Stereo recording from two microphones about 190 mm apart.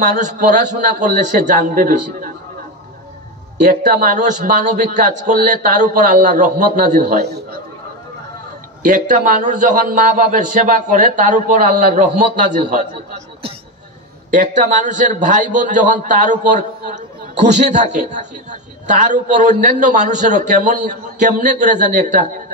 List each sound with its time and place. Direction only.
0.0 s a man's voice: 40° right (ahead or behind)
3.6 s a man's voice: 45° right (ahead or behind)
8.8 s a man's voice: 45° right (ahead or behind)
14.3 s a man's voice: 40° right (ahead or behind)